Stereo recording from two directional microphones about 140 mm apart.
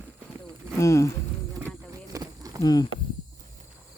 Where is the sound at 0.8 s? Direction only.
20° left (ahead or behind).